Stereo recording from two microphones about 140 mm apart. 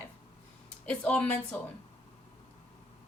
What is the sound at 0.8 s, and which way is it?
Speech, 10° left (ahead or behind).